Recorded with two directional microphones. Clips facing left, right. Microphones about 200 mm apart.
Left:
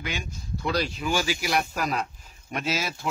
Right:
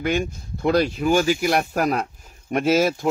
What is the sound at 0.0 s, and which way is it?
Speech, 55° right (ahead or behind).